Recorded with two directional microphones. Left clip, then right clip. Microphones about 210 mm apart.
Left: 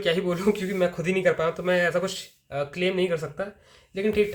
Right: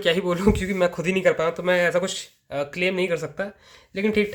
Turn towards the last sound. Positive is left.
turn(degrees=-35)  # may be behind; listen again after turning